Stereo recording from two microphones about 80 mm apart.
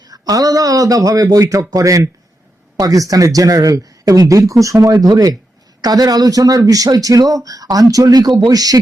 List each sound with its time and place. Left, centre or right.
0.0 s speech: right